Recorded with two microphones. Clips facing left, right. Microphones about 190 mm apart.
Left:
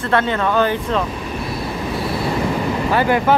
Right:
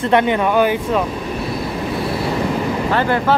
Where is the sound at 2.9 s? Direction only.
15° left (ahead or behind).